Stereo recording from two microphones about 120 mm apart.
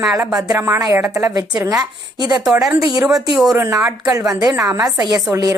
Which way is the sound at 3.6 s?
25° right (ahead or behind).